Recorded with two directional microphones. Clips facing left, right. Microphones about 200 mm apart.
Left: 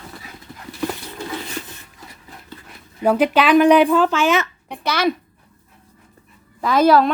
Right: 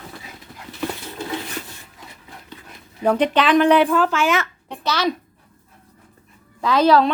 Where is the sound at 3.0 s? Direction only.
5° left (ahead or behind).